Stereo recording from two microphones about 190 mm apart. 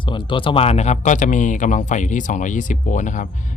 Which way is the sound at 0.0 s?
25° left (ahead or behind).